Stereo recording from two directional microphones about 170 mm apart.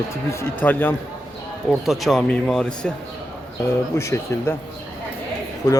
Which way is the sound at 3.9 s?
15° left (ahead or behind).